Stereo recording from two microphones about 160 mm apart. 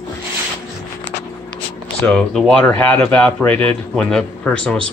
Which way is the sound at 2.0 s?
5° left (ahead or behind).